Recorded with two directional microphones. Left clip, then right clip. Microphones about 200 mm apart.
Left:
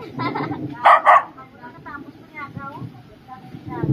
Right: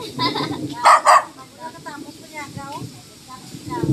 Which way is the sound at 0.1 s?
20° right (ahead or behind).